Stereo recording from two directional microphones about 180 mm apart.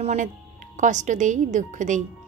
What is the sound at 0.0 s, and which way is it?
A woman's voice, 40° right (ahead or behind).